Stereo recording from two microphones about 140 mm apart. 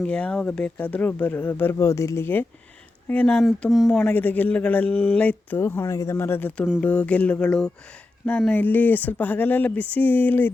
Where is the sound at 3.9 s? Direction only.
10° left (ahead or behind).